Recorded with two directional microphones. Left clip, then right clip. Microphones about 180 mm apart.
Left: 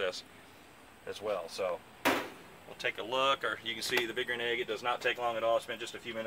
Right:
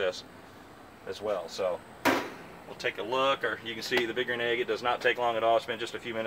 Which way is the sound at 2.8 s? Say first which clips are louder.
Right 3 dB; 5° right (ahead or behind).